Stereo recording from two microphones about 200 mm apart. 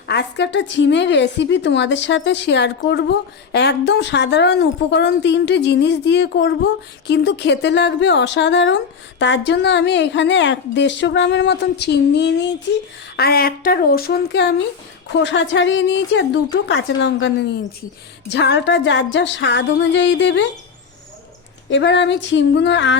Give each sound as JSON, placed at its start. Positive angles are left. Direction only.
{"t": 0.1, "sound": "a woman's voice", "side_deg": 55}
{"t": 15.2, "sound": "a woman's voice", "side_deg": 65}
{"t": 21.7, "sound": "a woman's voice", "side_deg": 65}